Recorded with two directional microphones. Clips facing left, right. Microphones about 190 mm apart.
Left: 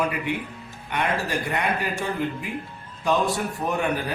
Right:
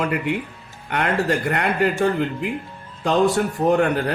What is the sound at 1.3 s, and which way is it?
Speech, 70° right (ahead or behind).